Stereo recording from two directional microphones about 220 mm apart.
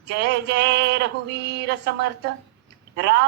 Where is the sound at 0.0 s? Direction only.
50° right (ahead or behind).